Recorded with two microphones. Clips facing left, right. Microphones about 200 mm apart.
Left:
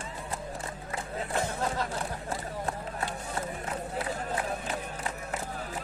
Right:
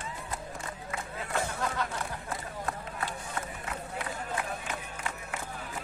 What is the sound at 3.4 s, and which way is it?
Run, 35° left (ahead or behind).